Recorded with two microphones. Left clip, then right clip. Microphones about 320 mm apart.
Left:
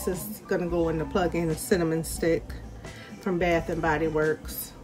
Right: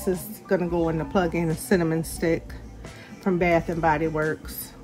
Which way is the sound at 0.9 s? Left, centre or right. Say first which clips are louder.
Right 2 dB; centre.